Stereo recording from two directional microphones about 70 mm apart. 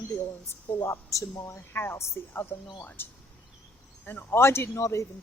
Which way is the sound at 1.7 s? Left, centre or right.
Left.